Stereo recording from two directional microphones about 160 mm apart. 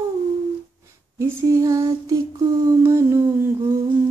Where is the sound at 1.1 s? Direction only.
20° right (ahead or behind).